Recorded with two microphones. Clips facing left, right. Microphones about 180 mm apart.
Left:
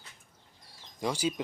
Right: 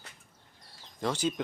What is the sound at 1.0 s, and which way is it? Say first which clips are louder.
Speech: even; 10° left (ahead or behind).